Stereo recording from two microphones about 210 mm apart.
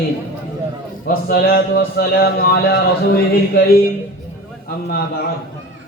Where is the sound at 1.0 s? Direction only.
45° left (ahead or behind).